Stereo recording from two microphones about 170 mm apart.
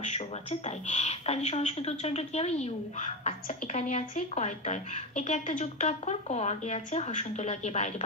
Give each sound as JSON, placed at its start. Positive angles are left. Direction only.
{"t": 0.0, "sound": "speech", "side_deg": 40}